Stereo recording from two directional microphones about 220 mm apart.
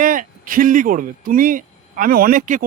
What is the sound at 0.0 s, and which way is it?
Speech, 40° right (ahead or behind).